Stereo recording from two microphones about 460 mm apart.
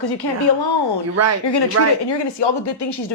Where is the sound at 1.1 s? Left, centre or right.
Right.